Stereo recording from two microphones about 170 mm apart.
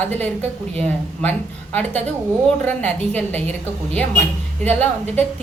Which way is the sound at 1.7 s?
10° left (ahead or behind).